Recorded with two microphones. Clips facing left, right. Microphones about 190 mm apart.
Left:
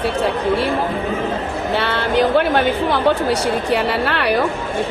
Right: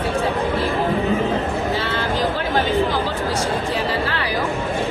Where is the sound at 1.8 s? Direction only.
65° left (ahead or behind).